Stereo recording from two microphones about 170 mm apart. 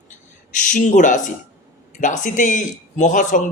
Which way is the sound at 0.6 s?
45° left (ahead or behind).